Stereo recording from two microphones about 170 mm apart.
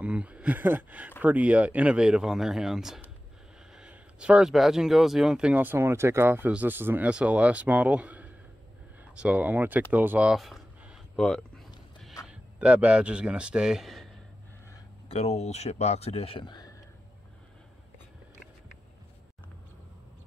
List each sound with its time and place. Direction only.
0.0 s speech: 10° right (ahead or behind)
9.9 s a sound: 10° right (ahead or behind)
12.3 s a man's voice: 5° right (ahead or behind)
15.0 s speech: 40° left (ahead or behind)